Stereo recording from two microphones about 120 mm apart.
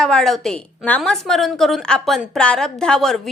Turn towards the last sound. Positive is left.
turn(degrees=5)  # may be behind; listen again after turning